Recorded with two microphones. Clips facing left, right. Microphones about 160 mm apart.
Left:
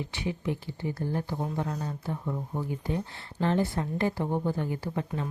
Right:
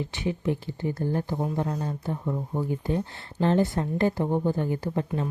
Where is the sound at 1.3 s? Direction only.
25° right (ahead or behind).